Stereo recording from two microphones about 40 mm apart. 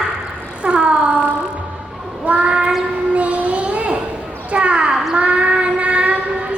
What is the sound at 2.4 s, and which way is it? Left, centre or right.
Child singing, right.